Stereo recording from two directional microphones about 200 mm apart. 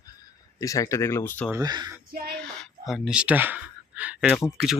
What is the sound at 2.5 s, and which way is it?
Speech, centre (ahead or behind).